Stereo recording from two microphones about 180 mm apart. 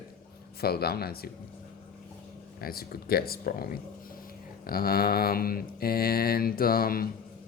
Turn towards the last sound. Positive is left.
turn(degrees=55)  # may be behind; listen again after turning